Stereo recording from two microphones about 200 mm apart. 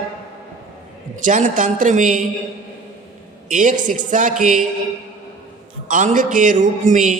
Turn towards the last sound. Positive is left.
turn(degrees=-40)  # may be behind; listen again after turning